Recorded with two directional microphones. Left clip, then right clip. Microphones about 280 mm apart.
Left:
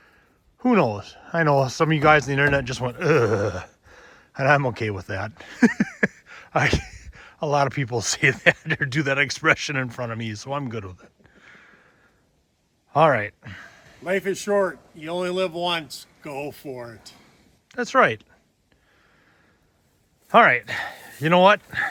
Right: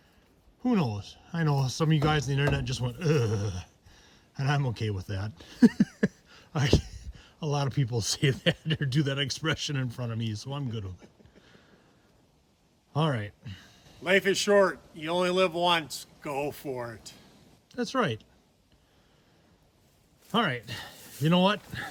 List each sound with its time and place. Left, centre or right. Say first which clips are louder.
0.9 s speech: left 12 dB; centre
3.6 s a sound: left 11 dB; left
4.4 s speech: left 13 dB; centre
6.8 s a sound: left 9 dB; centre
7.1 s speech: left 11 dB; centre
12.9 s speech: left 13 dB; centre
14.0 s speech: even; centre
17.7 s speech: left 10 dB; centre
20.7 s speech: left 12 dB; centre